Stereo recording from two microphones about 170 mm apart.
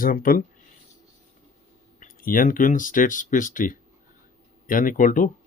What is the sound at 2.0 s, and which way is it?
Speech, 55° left (ahead or behind).